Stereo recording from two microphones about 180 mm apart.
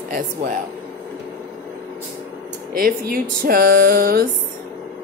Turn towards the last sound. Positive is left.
turn(degrees=-55)  # may be behind; listen again after turning